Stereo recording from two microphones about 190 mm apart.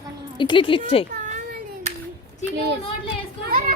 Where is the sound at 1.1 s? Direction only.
40° right (ahead or behind).